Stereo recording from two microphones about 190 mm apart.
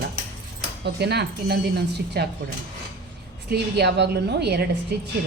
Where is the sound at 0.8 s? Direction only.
60° right (ahead or behind).